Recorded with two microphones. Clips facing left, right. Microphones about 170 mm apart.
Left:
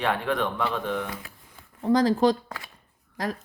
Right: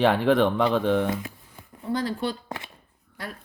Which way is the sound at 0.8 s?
30° right (ahead or behind).